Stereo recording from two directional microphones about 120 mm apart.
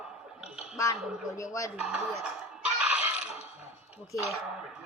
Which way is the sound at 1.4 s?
25° left (ahead or behind).